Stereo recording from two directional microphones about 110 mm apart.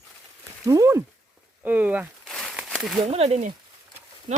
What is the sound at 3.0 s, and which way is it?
Speech, 70° right (ahead or behind).